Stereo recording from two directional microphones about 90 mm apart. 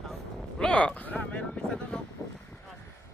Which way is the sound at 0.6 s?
10° left (ahead or behind).